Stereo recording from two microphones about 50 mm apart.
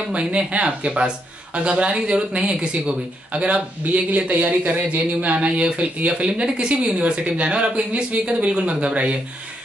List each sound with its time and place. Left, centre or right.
0.1 s speech: right